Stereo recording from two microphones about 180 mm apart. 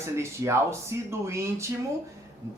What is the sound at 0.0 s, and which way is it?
Speech, 15° right (ahead or behind).